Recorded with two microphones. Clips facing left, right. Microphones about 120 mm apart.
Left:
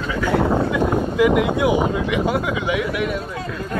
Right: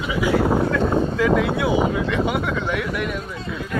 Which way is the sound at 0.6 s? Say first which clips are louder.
Even; 15° left (ahead or behind).